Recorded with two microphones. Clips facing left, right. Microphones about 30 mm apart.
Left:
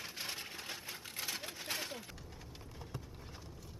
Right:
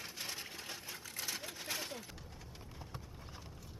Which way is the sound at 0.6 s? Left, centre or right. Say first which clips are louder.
Left 2 dB; left.